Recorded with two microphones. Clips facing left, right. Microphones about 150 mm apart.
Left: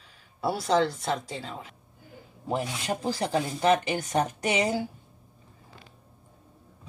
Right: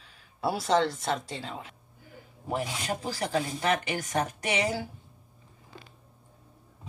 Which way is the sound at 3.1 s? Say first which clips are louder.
Left 2 dB; 30° left (ahead or behind).